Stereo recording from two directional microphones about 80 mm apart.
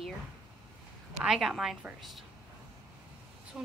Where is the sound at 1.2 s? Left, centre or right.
Centre.